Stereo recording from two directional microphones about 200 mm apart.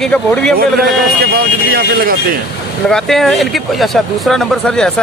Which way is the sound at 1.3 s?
50° right (ahead or behind).